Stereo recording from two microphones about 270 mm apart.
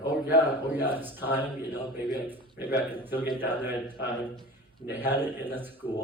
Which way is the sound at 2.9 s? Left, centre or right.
Centre.